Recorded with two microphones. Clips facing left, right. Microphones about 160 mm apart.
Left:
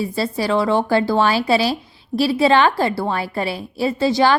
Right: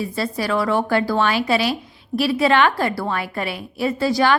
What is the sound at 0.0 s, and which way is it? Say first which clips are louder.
A woman's voice: left 2 dB; 30° left (ahead or behind).